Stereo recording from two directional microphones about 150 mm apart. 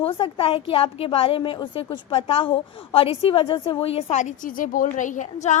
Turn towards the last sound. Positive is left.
turn(degrees=55)  # may be behind; listen again after turning